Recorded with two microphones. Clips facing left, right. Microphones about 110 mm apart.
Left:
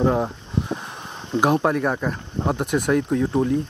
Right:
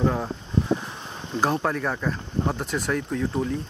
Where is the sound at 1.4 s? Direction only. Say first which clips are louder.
Left 5 dB; 15° left (ahead or behind).